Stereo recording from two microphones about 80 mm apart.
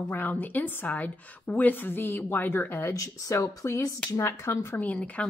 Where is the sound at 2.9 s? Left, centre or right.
Left.